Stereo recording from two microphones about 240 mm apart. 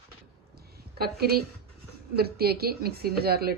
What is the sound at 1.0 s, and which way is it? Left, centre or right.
A woman's voice, right.